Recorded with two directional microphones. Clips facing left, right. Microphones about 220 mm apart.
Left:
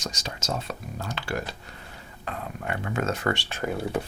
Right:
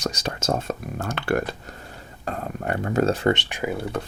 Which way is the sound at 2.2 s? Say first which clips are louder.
Right 5 dB; 45° right (ahead or behind).